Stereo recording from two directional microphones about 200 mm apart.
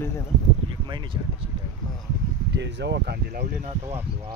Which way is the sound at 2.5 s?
60° right (ahead or behind).